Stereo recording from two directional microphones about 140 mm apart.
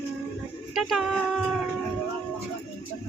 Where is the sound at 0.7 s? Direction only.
Centre (ahead or behind).